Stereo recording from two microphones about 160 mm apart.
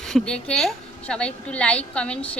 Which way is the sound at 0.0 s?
5° left (ahead or behind).